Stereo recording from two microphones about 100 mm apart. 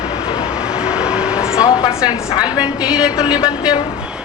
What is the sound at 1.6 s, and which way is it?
Speech, 40° left (ahead or behind).